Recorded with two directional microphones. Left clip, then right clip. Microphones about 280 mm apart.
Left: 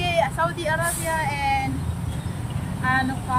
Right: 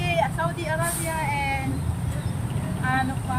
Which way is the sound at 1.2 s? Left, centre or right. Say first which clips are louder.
Left 3 dB; centre.